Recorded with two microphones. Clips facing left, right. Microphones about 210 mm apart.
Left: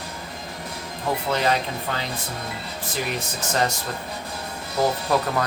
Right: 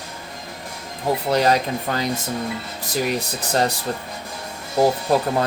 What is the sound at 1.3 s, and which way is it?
Speech, 40° right (ahead or behind).